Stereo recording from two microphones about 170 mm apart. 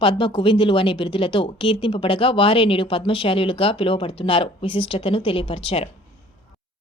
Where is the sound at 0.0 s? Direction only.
30° left (ahead or behind).